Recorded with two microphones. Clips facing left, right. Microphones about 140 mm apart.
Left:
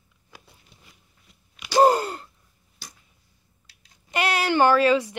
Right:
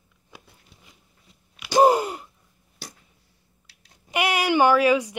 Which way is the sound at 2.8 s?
65° right (ahead or behind).